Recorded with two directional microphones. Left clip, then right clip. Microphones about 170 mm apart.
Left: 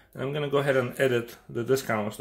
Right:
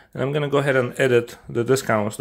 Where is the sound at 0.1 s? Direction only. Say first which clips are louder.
Right 6 dB; 50° right (ahead or behind).